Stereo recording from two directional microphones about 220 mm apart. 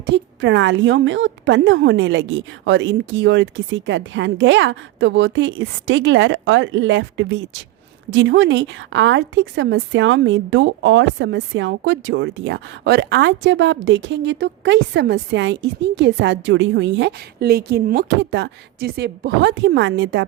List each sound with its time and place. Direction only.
0.0 s a woman's voice: 55° right (ahead or behind)